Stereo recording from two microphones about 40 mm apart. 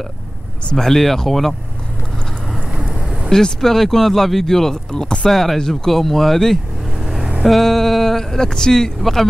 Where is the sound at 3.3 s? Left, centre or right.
Centre.